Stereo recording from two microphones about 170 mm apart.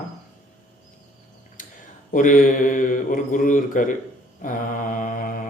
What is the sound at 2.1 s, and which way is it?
Mantra, 50° left (ahead or behind).